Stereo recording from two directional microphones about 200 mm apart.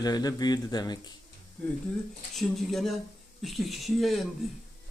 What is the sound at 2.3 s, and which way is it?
A man's voice, centre (ahead or behind).